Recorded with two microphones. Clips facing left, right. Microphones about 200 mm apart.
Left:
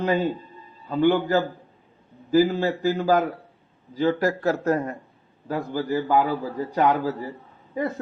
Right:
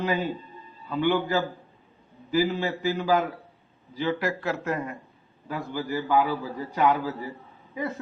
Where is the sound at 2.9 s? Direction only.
40° left (ahead or behind).